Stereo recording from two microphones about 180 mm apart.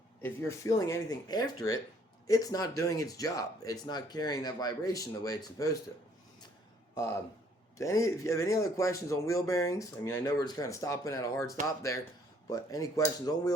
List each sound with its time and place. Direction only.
0.2 s speech: 15° left (ahead or behind)
7.8 s a man's voice: 15° left (ahead or behind)